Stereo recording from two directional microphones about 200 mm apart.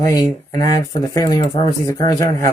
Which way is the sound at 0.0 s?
15° left (ahead or behind).